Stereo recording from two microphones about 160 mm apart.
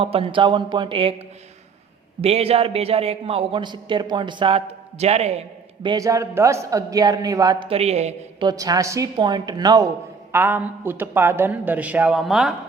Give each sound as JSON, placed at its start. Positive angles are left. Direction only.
{"t": 0.0, "sound": "a man's voice", "side_deg": -35}
{"t": 2.2, "sound": "a man's voice", "side_deg": -40}
{"t": 5.9, "sound": "a man's voice", "side_deg": -20}
{"t": 7.7, "sound": "a man's voice", "side_deg": -40}
{"t": 8.4, "sound": "a man's voice", "side_deg": -25}
{"t": 10.3, "sound": "speech", "side_deg": -10}